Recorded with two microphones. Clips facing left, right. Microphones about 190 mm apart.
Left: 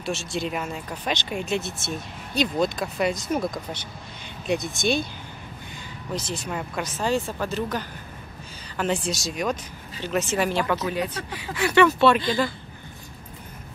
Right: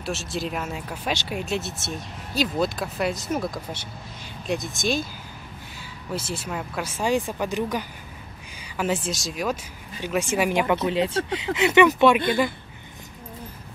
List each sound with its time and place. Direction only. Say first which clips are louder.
0.0 s speech: left 1 dB; centre (ahead or behind)
6.1 s speech: even; 10° right (ahead or behind)
10.8 s speech: right 4 dB; 25° right (ahead or behind)